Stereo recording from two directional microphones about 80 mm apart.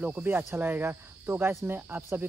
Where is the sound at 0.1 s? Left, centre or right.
Right.